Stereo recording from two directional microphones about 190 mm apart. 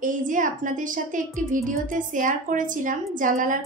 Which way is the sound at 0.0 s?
45° right (ahead or behind).